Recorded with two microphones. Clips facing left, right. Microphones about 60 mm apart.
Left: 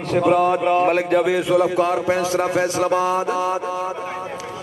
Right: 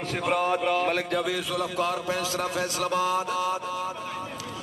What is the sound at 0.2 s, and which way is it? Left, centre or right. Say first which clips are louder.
Speech: left 8 dB; centre.